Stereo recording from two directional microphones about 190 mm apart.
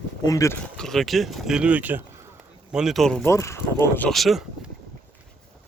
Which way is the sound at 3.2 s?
15° left (ahead or behind).